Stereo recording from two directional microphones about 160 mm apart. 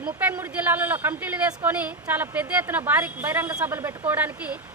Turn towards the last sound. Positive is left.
turn(degrees=-10)  # may be behind; listen again after turning